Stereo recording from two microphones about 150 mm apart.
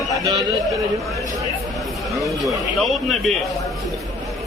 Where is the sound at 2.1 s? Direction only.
Centre (ahead or behind).